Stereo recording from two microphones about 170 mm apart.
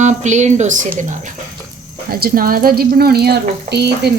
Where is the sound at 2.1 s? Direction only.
60° right (ahead or behind).